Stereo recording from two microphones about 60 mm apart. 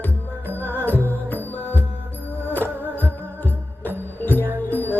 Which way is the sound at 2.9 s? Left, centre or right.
Left.